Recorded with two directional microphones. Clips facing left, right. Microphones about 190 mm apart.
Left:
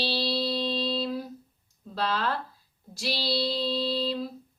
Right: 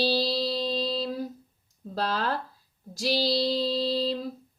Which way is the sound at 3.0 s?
40° right (ahead or behind).